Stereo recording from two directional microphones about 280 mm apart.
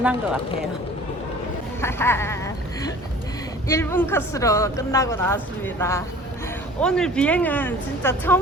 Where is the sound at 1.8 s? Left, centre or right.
Centre.